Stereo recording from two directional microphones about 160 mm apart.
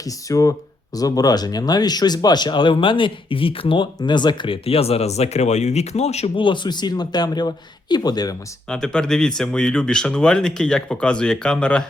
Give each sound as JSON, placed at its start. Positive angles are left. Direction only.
{"t": 0.3, "sound": "speech", "side_deg": 20}
{"t": 8.7, "sound": "speech", "side_deg": 5}